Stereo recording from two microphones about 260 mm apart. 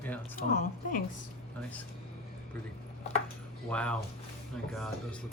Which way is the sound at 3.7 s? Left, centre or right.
Centre.